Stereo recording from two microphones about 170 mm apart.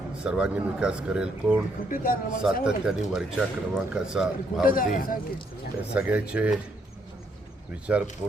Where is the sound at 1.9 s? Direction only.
55° left (ahead or behind).